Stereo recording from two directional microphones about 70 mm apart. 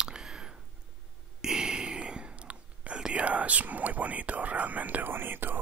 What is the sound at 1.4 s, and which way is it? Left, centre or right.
Whispering, centre.